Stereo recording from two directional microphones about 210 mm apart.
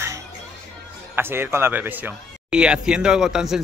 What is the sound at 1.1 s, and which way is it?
Speech, 10° right (ahead or behind).